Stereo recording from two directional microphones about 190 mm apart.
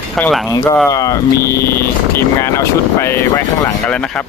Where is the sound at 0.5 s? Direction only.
15° left (ahead or behind).